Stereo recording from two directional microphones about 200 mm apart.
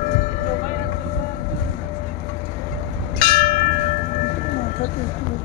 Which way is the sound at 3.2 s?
45° left (ahead or behind).